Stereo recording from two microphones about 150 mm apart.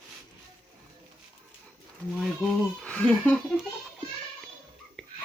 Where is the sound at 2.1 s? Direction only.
Centre (ahead or behind).